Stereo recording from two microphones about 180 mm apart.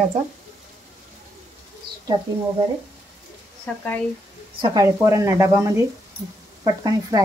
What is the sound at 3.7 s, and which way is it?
Speech, 5° left (ahead or behind).